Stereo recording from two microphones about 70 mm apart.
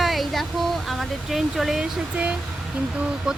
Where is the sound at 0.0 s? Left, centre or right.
Centre.